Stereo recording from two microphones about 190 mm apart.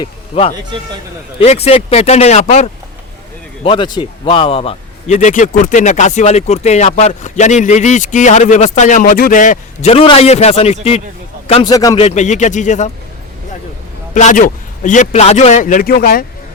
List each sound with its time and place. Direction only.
0.0 s a man's voice: 30° left (ahead or behind)
3.6 s a man's voice: 25° left (ahead or behind)
11.6 s a man's voice: 20° left (ahead or behind)
11.9 s a man's voice: 35° left (ahead or behind)
14.1 s a man's voice: 40° left (ahead or behind)